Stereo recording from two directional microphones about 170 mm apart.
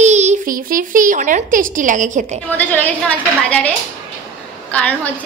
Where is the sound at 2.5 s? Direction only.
10° left (ahead or behind).